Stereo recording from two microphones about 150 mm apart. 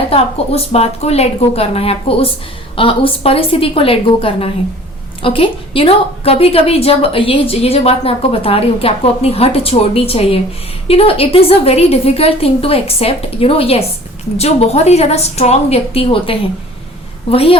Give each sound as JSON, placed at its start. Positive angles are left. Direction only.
{"t": 0.1, "sound": "a woman's voice", "side_deg": 45}